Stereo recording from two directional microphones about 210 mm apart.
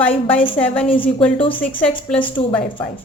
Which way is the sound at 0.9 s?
25° left (ahead or behind).